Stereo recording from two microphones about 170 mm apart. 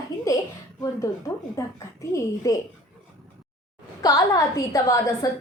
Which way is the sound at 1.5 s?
20° left (ahead or behind).